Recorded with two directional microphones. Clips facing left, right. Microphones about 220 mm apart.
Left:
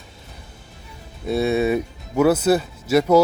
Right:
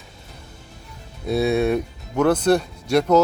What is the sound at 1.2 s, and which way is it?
Speech, centre (ahead or behind).